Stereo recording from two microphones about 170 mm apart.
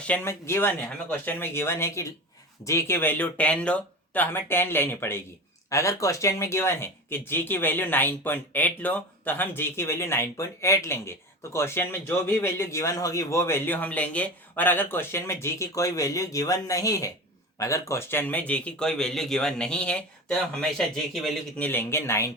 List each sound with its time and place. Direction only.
0.1 s a man's voice: 15° left (ahead or behind)
21.7 s a man's voice: 15° left (ahead or behind)